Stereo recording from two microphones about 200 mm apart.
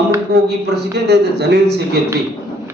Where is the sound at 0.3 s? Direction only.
55° right (ahead or behind).